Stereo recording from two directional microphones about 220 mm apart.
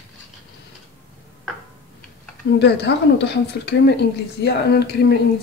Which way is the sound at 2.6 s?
50° left (ahead or behind).